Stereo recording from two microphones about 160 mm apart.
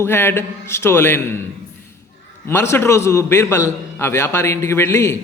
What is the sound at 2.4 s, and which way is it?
A man's voice, 15° left (ahead or behind).